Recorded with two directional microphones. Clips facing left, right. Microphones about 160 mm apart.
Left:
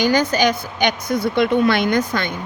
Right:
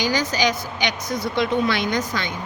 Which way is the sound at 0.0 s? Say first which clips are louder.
Left 5 dB; 55° left (ahead or behind).